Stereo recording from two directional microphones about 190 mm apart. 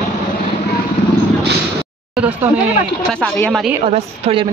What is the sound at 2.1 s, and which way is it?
Speech, 10° right (ahead or behind).